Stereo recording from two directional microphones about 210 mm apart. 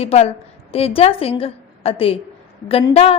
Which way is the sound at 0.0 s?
30° left (ahead or behind).